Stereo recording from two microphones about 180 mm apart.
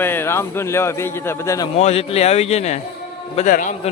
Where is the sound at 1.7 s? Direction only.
35° left (ahead or behind).